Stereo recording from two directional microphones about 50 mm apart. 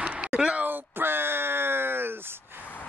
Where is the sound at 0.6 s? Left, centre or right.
Right.